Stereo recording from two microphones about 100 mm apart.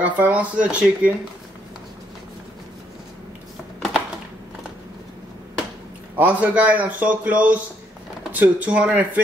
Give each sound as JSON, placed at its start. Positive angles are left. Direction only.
{"t": 0.0, "sound": "a man's voice", "side_deg": -15}
{"t": 6.1, "sound": "a man's voice", "side_deg": -15}